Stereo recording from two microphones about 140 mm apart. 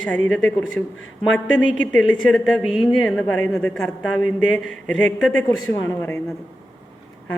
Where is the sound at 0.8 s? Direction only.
5° left (ahead or behind).